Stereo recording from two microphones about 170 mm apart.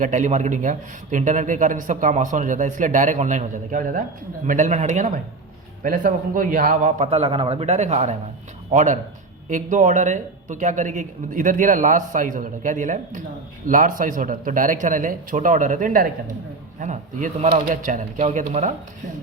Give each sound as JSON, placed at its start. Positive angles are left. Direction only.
{"t": 0.0, "sound": "a man's voice", "side_deg": -50}